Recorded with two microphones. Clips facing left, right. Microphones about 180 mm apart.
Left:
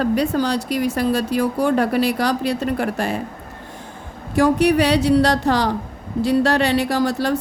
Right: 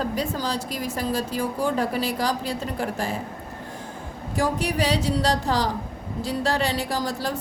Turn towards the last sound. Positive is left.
turn(degrees=70)  # may be behind; listen again after turning